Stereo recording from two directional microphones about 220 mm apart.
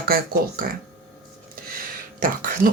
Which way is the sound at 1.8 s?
40° right (ahead or behind).